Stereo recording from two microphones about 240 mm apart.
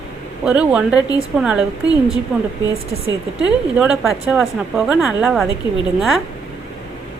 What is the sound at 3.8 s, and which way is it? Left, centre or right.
Speech, centre.